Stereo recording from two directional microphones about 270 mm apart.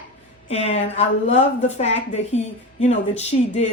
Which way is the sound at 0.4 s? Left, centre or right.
Left.